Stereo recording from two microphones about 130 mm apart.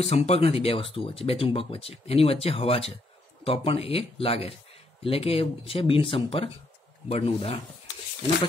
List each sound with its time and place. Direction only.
0.0 s speech: 50° left (ahead or behind)